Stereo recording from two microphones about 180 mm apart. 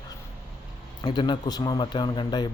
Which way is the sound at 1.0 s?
25° left (ahead or behind).